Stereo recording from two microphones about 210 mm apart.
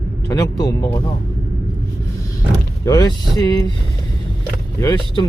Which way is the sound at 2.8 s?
15° left (ahead or behind).